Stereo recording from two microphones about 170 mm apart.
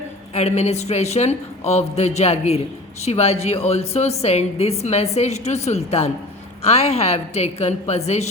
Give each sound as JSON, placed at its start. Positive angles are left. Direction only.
{"t": 0.3, "sound": "a woman's voice", "side_deg": 40}